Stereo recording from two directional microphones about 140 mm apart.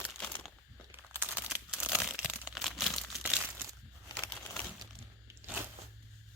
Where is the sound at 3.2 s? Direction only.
10° right (ahead or behind).